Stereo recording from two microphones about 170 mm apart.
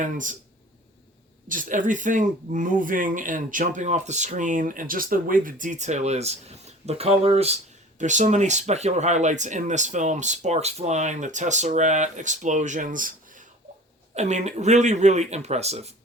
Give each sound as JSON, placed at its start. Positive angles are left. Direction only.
{"t": 0.0, "sound": "speech", "side_deg": -50}
{"t": 1.5, "sound": "speech", "side_deg": -50}